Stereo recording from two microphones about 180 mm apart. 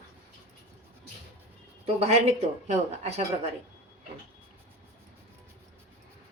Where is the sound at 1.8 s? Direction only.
35° right (ahead or behind).